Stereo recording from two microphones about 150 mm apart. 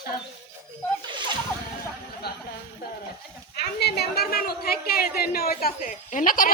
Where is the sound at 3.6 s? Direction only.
90° left.